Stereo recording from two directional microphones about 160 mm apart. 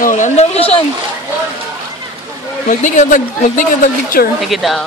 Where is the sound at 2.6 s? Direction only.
50° left (ahead or behind).